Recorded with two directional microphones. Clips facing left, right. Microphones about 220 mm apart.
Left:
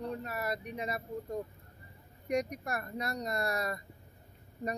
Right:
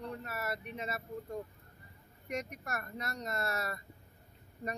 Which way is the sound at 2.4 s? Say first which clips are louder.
Left 4 dB; 35° left (ahead or behind).